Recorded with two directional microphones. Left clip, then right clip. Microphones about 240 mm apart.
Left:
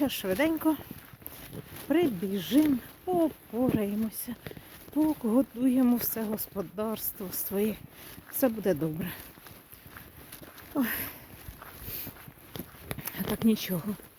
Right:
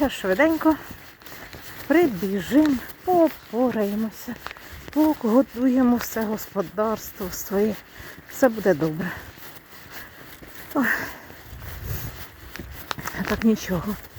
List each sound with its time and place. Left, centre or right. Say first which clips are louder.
0.0 s speech: right 8 dB; centre
1.9 s speech: right 7 dB; centre
10.8 s speech: right 9 dB; centre
13.1 s a sound: right 6 dB; centre